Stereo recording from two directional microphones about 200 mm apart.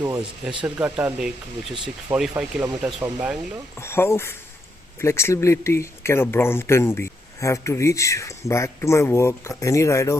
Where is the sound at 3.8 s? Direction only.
10° left (ahead or behind).